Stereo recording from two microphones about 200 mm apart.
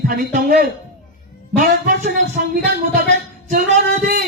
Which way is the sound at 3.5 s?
45° right (ahead or behind).